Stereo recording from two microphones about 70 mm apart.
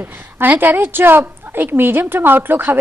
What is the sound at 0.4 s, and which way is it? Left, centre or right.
A woman's voice, right.